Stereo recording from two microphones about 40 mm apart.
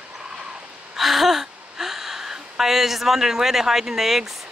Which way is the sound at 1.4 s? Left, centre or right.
Centre.